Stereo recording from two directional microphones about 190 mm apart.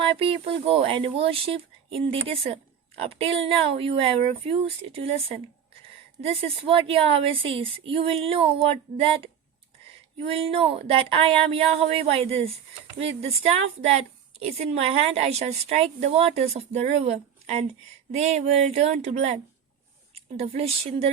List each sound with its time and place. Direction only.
0.0 s a woman's voice: 30° right (ahead or behind)
6.2 s a woman's voice: 30° right (ahead or behind)